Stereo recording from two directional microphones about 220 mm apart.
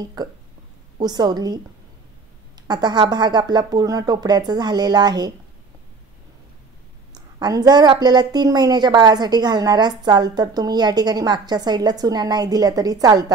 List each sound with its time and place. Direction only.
0.0 s a woman's voice: 20° right (ahead or behind)
2.7 s speech: 20° right (ahead or behind)
7.3 s a woman's voice: 20° right (ahead or behind)